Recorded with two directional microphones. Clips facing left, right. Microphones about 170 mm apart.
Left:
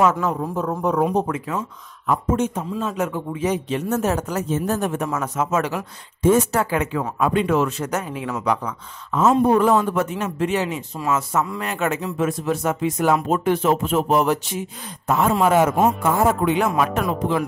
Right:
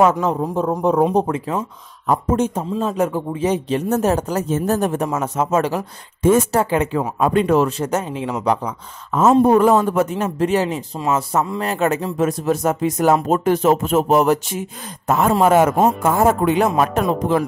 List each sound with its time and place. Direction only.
0.1 s speech: 25° right (ahead or behind)
9.4 s speech: 45° right (ahead or behind)